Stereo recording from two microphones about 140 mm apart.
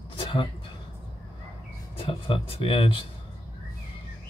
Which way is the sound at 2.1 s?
40° left (ahead or behind).